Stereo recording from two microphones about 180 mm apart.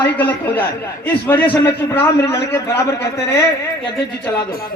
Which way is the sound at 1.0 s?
10° left (ahead or behind).